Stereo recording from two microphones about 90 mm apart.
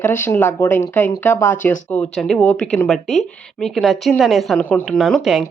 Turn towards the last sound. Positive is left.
turn(degrees=0)  # may be behind; listen again after turning